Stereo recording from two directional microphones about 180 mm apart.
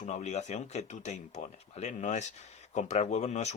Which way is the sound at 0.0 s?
40° left (ahead or behind).